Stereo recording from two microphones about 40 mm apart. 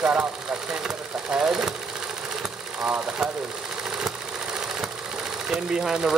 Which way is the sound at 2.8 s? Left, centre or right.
Right.